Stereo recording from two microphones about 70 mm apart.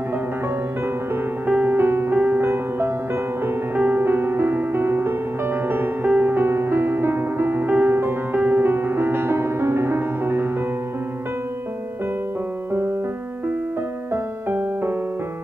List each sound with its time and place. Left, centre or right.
1.5 s music: right